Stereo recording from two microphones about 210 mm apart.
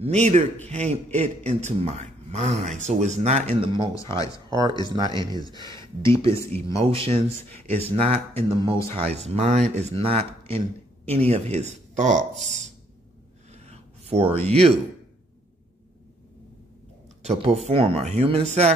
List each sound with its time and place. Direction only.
0.0 s speech: 30° right (ahead or behind)
7.2 s speech: 10° left (ahead or behind)
7.7 s speech: 30° right (ahead or behind)
13.5 s a sound: 30° right (ahead or behind)
14.4 s speech: 30° right (ahead or behind)
17.2 s speech: 30° right (ahead or behind)